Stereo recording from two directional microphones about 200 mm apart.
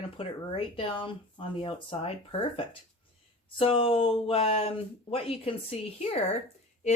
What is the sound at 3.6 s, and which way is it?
Speech, 25° left (ahead or behind).